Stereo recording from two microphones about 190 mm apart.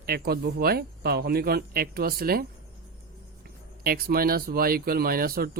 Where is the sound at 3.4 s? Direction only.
50° right (ahead or behind).